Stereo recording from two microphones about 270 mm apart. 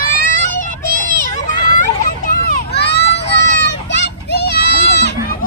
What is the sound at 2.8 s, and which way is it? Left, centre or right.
Children playing, left.